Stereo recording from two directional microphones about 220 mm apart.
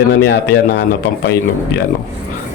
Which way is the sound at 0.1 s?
55° left (ahead or behind).